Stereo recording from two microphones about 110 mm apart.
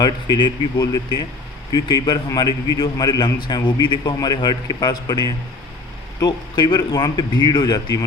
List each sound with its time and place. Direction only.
0.0 s a man's voice: 40° left (ahead or behind)